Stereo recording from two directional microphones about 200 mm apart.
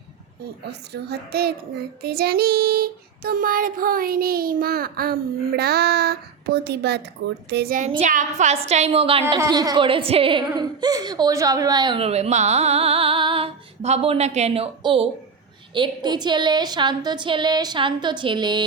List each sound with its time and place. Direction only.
0.6 s music: 55° right (ahead or behind)
7.2 s speech: 60° right (ahead or behind)
7.5 s music: 50° right (ahead or behind)
7.9 s a woman's voice: 35° right (ahead or behind)